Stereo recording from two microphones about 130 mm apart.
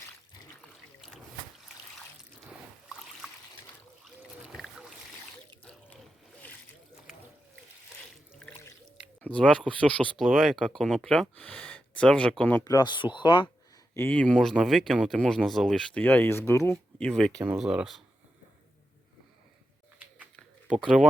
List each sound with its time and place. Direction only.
0.6 s trickle: 5° left (ahead or behind)
2.5 s boat: centre (ahead or behind)
6.4 s slosh: 15° left (ahead or behind)
9.2 s speech: 10° left (ahead or behind)
12.6 s speech: 30° left (ahead or behind)
13.9 s speech: 15° left (ahead or behind)
17.0 s speech: 5° left (ahead or behind)
20.7 s speech: 5° right (ahead or behind)